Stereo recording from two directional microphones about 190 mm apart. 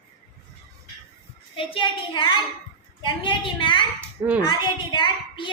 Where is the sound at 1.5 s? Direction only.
25° left (ahead or behind).